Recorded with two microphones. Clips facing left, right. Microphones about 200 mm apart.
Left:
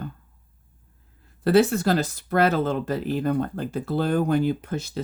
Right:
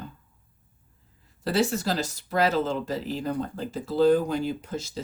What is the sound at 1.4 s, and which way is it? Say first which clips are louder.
Speech: left 6 dB; 55° left (ahead or behind).